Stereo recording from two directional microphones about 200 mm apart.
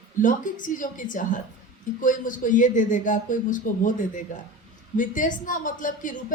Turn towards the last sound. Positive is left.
turn(degrees=40)  # may be behind; listen again after turning